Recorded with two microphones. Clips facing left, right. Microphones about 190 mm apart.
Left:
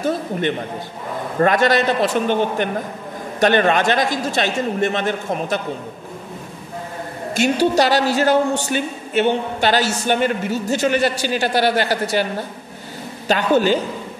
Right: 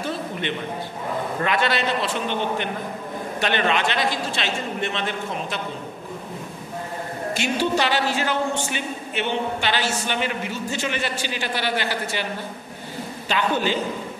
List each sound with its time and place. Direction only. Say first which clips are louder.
0.0 s a man's voice: left 7 dB; 45° left (ahead or behind)
7.3 s a man's voice: left 7 dB; 40° left (ahead or behind)
13.3 s a man's voice: left 7 dB; 40° left (ahead or behind)